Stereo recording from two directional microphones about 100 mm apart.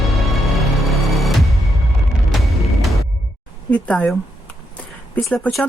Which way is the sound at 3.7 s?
15° left (ahead or behind).